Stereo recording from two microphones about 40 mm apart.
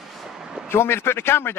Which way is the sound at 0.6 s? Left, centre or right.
Left.